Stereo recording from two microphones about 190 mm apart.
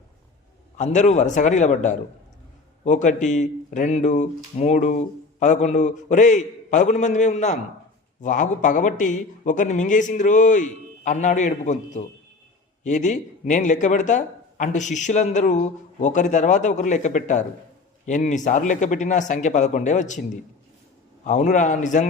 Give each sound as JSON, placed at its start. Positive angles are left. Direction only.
{"t": 0.8, "sound": "speech", "side_deg": 40}